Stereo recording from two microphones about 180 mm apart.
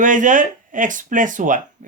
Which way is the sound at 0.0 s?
45° right (ahead or behind).